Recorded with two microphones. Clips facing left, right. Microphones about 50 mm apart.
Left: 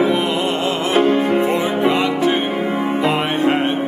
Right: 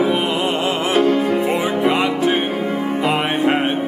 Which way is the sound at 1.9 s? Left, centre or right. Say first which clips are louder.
Even; centre.